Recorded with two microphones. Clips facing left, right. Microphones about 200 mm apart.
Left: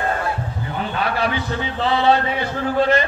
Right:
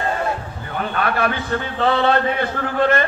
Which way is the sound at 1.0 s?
55° right (ahead or behind).